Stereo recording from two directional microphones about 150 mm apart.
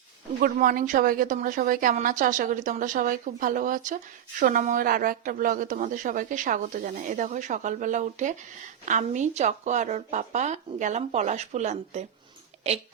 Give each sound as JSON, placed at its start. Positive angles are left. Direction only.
{"t": 0.4, "sound": "speech", "side_deg": -65}